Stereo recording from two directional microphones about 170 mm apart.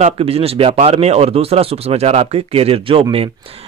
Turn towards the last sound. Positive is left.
turn(degrees=-35)  # may be behind; listen again after turning